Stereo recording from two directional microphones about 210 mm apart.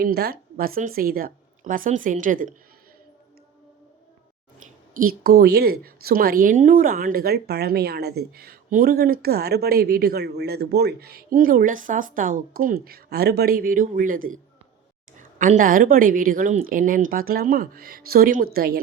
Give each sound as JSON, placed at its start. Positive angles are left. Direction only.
{"t": 0.0, "sound": "a woman's voice", "side_deg": -50}
{"t": 4.9, "sound": "a woman's voice", "side_deg": -45}